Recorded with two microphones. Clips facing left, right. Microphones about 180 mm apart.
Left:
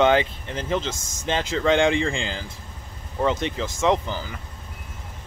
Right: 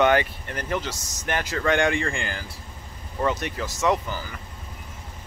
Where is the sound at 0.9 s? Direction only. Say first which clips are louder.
Left 3 dB; 50° left (ahead or behind).